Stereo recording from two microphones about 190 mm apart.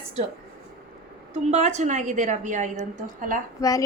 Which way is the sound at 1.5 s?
35° right (ahead or behind).